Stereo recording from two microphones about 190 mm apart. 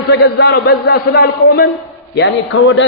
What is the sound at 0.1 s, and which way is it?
A man's voice, 60° left (ahead or behind).